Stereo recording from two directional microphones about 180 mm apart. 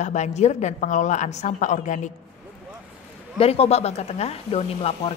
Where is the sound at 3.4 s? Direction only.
35° left (ahead or behind).